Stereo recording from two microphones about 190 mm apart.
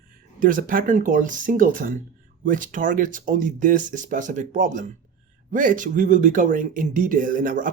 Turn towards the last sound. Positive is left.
turn(degrees=-45)  # may be behind; listen again after turning